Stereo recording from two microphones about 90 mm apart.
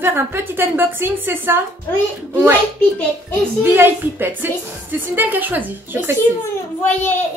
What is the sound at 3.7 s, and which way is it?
A woman's voice, 25° right (ahead or behind).